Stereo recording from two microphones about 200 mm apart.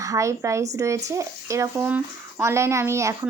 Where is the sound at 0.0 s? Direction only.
15° right (ahead or behind).